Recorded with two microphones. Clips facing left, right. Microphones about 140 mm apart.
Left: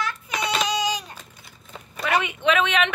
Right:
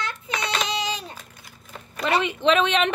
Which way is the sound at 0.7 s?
25° right (ahead or behind).